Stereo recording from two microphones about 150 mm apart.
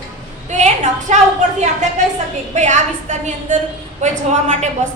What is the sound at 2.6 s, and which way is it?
A woman's voice, 50° right (ahead or behind).